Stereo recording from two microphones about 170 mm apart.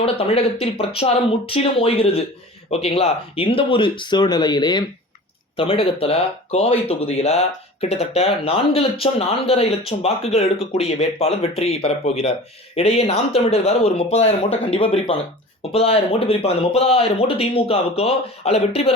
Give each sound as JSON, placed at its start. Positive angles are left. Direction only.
{"t": 0.0, "sound": "speech", "side_deg": 35}